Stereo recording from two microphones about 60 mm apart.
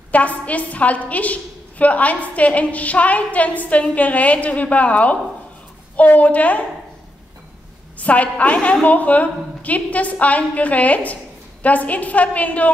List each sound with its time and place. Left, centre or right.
0.1 s a woman's voice: left
8.0 s a woman's voice: left